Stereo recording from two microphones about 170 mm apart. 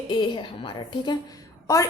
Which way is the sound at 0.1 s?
30° left (ahead or behind).